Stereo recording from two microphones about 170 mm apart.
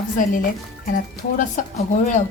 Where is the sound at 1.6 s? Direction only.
50° left (ahead or behind).